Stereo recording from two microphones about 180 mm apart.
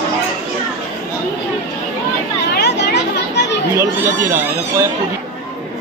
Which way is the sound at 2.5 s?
70° left (ahead or behind).